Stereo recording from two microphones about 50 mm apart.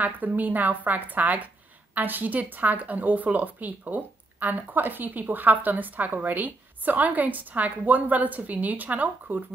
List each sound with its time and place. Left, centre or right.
0.0 s a woman's voice: right